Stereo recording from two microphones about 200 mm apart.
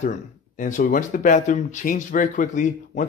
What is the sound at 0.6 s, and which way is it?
Speech, 40° left (ahead or behind).